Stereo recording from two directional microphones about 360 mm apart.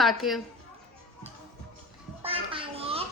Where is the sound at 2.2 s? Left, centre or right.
Centre.